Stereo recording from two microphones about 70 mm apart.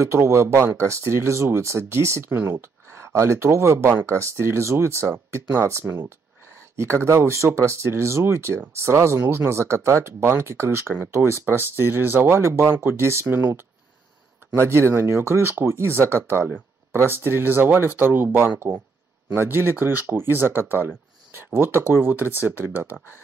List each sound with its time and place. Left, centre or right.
0.0 s speech: right
14.5 s speech: right